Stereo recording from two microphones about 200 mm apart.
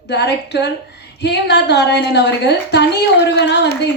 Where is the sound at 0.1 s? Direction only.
60° left (ahead or behind).